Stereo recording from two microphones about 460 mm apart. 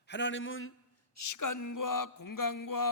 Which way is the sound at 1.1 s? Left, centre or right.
Left.